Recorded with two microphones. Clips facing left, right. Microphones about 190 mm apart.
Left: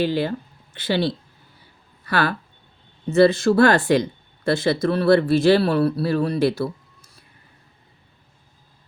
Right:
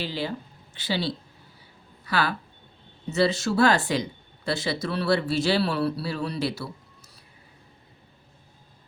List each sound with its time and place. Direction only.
0.0 s speech: 55° left (ahead or behind)